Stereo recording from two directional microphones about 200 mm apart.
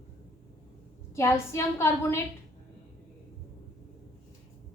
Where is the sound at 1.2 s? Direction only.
15° left (ahead or behind).